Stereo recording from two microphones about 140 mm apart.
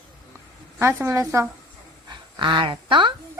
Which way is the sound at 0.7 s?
20° right (ahead or behind).